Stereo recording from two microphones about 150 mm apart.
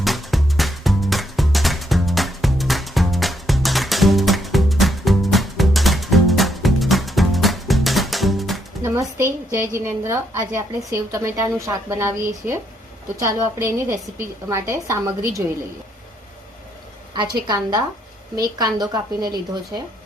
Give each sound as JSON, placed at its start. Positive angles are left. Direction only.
{"t": 0.0, "sound": "music", "side_deg": 0}
{"t": 8.8, "sound": "a woman's voice", "side_deg": -20}
{"t": 17.2, "sound": "speech", "side_deg": -30}